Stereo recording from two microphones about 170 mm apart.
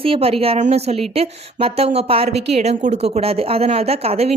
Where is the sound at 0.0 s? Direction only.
35° right (ahead or behind).